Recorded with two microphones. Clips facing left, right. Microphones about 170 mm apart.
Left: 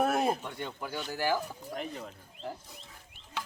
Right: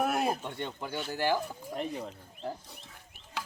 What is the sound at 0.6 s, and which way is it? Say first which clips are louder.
Speech: right 1 dB; 20° right (ahead or behind).